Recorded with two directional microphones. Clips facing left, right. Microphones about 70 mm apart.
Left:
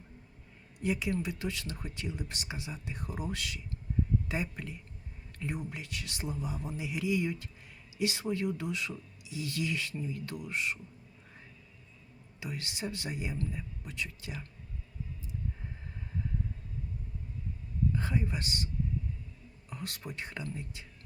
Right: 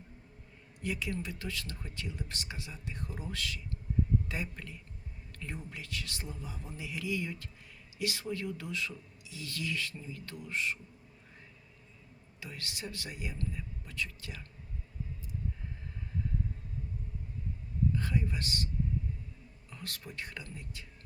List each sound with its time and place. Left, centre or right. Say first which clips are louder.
0.8 s speech: left 4 dB; centre
5.3 s whispering: left 6 dB; centre
5.7 s speech: even; centre
12.4 s speech: left 4 dB; centre
17.9 s a man's voice: left 1 dB; left
19.7 s speech: left 3 dB; centre